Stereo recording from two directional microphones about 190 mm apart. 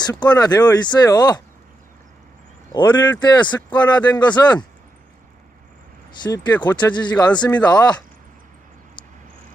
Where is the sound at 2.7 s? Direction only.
25° left (ahead or behind).